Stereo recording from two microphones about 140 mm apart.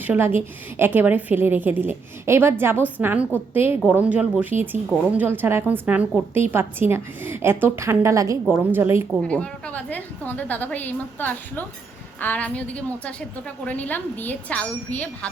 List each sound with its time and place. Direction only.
0.0 s a woman's voice: 15° right (ahead or behind)
9.2 s a woman's voice: 10° left (ahead or behind)